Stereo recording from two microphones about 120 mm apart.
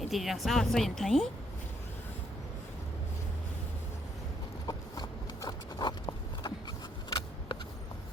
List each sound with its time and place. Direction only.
0.0 s speech: centre (ahead or behind)
4.6 s horse: 35° left (ahead or behind)